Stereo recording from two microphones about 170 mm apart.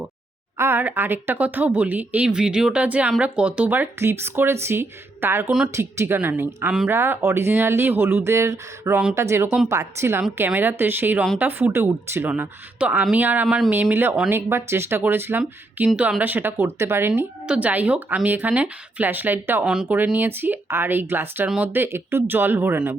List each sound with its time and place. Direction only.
0.5 s speech: 15° right (ahead or behind)
5.7 s speech: 15° right (ahead or behind)